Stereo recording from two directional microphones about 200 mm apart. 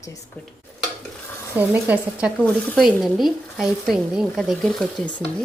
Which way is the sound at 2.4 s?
Centre (ahead or behind).